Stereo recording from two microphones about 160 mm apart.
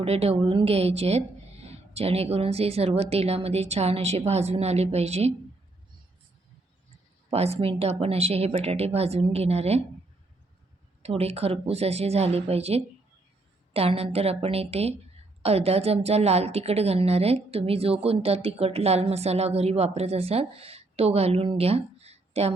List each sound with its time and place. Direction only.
0.0 s a woman's voice: 40° right (ahead or behind)
7.3 s a woman's voice: 40° right (ahead or behind)
11.0 s a woman's voice: 40° right (ahead or behind)